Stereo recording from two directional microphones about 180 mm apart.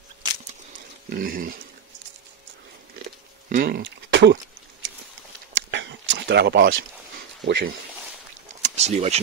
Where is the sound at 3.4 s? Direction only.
55° right (ahead or behind); by 4.4 s 75° right (ahead or behind).